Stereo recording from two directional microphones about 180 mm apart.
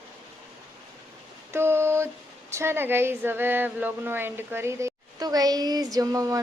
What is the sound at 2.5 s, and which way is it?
A woman's voice, 15° right (ahead or behind).